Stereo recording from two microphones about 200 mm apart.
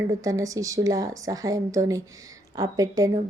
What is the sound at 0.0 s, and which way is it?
A woman's voice, 15° right (ahead or behind).